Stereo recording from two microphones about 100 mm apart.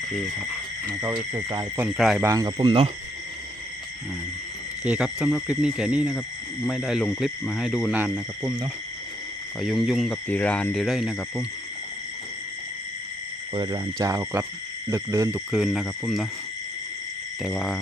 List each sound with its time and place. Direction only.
1.9 s speech: centre (ahead or behind)
2.4 s speech: 45° right (ahead or behind)
4.8 s speech: 10° right (ahead or behind)
9.6 s speech: centre (ahead or behind)
10.2 s speech: 15° left (ahead or behind)
10.8 s speech: 5° right (ahead or behind)
13.5 s speech: 50° right (ahead or behind)
14.1 s speech: 25° right (ahead or behind)
15.5 s speech: centre (ahead or behind)
17.4 s speech: centre (ahead or behind)